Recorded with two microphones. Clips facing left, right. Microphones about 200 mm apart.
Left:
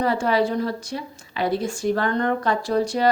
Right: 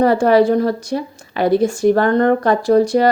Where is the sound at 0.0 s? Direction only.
45° right (ahead or behind).